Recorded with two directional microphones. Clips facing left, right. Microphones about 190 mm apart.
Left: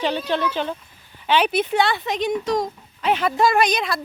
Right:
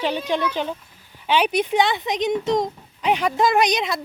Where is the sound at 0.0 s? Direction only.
10° right (ahead or behind).